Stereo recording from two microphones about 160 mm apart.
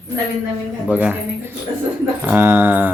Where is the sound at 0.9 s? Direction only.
10° right (ahead or behind).